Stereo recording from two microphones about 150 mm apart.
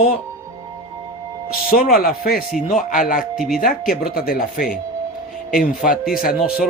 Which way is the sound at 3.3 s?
Centre (ahead or behind).